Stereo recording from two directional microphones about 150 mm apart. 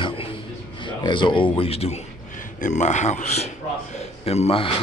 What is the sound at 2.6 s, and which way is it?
A man's voice, 55° left (ahead or behind).